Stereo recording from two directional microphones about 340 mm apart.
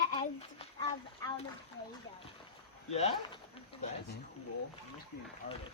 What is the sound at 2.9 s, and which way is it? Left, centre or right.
Speech, centre.